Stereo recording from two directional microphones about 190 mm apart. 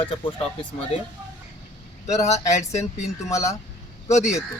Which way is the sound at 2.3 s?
35° left (ahead or behind).